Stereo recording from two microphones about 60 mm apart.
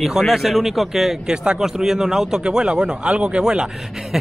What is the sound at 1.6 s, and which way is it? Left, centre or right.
Speech, centre.